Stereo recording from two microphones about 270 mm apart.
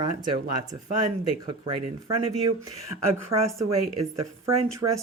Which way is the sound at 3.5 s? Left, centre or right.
Right.